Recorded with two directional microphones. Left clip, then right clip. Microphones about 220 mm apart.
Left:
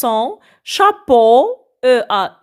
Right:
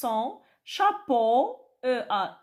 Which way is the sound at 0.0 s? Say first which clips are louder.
Left 12 dB; 45° left (ahead or behind).